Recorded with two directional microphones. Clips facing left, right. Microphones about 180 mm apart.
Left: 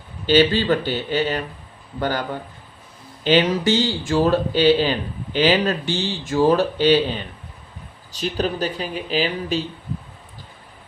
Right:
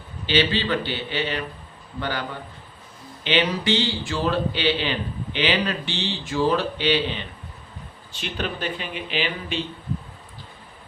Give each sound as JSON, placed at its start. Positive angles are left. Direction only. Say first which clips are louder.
{"t": 0.3, "sound": "speech", "louder": "left 6 dB", "side_deg": 45}
{"t": 3.2, "sound": "speech", "louder": "left 5 dB", "side_deg": 40}